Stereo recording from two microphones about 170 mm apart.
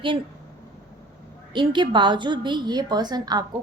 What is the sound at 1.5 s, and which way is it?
A woman's voice, 25° right (ahead or behind).